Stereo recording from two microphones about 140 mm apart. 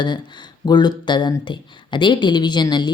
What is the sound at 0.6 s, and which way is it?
Speech, 30° left (ahead or behind).